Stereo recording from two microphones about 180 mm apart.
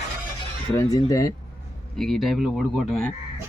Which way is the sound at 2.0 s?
Centre (ahead or behind).